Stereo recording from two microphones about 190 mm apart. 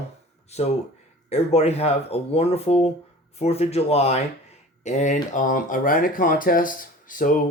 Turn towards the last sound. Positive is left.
turn(degrees=45)  # may be behind; listen again after turning